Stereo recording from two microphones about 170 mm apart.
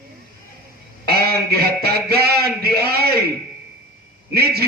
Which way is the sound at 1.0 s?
65° right (ahead or behind).